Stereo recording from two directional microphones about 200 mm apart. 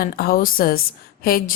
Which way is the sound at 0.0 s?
45° left (ahead or behind).